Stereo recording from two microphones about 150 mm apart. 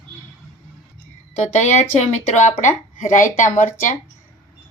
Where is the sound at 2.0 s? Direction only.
50° left (ahead or behind).